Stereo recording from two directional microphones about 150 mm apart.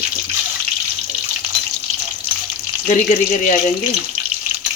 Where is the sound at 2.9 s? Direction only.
60° left (ahead or behind).